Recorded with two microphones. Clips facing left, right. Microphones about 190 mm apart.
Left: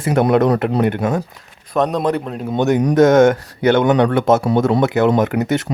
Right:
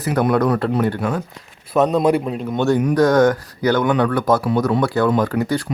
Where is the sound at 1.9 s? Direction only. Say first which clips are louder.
Right 2 dB; 10° right (ahead or behind).